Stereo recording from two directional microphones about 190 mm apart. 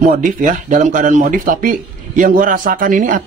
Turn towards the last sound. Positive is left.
turn(degrees=-45)  # may be behind; listen again after turning